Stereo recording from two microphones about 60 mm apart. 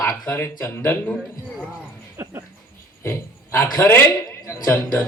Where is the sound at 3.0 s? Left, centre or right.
Left.